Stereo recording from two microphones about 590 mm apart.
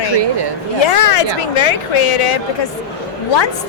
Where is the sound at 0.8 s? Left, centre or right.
Left.